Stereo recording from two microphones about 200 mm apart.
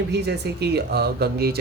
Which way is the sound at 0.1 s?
55° right (ahead or behind).